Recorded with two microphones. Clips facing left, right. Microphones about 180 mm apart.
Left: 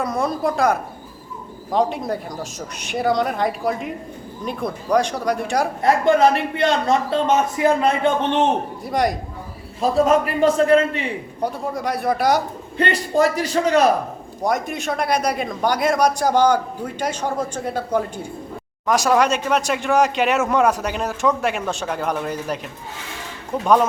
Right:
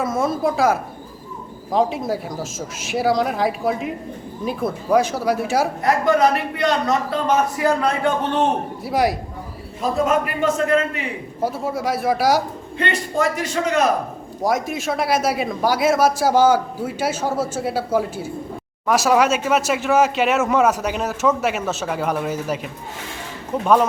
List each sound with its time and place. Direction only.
0.0 s a woman's voice: centre (ahead or behind)
5.8 s a man's voice: 25° left (ahead or behind)
8.8 s speech: 5° right (ahead or behind)
10.1 s a man's voice: 30° left (ahead or behind)
11.3 s speech: 5° right (ahead or behind)
12.7 s a man's voice: 35° left (ahead or behind)
14.4 s speech: centre (ahead or behind)